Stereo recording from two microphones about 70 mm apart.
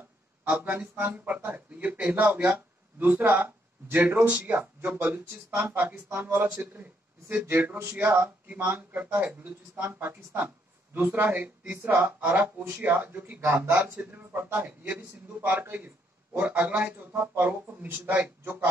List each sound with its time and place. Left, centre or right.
0.5 s speech: right
12.0 s speech: right